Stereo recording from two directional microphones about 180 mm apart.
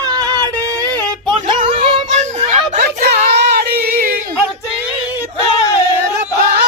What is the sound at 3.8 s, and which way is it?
Whimper, 55° right (ahead or behind).